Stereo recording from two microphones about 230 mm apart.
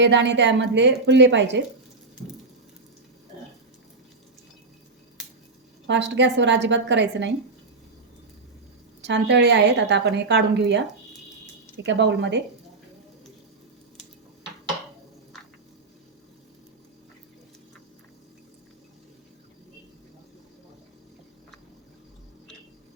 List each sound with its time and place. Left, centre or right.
0.0 s a woman's voice: right
5.9 s a woman's voice: right
9.0 s a woman's voice: right